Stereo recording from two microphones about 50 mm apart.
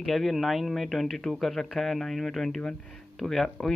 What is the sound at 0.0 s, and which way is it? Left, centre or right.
Speech, centre.